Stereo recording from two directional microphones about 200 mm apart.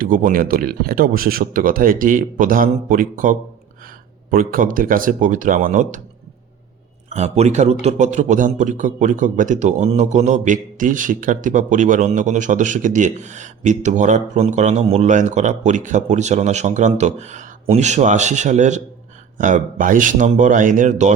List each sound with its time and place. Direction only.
0.0 s speech: 45° right (ahead or behind)
7.1 s a man's voice: 35° right (ahead or behind)